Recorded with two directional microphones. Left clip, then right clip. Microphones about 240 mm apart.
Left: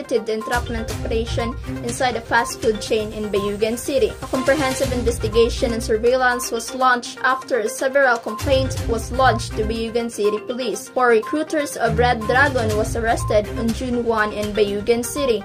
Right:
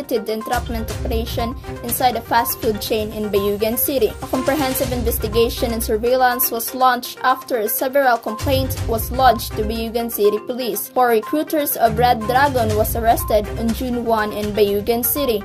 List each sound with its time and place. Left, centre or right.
0.1 s speech: right